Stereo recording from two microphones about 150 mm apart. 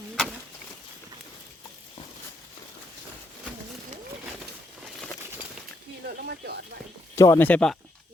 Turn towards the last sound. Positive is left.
turn(degrees=5)  # may be behind; listen again after turning